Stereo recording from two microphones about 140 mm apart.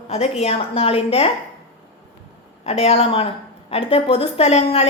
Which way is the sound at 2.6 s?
45° left (ahead or behind).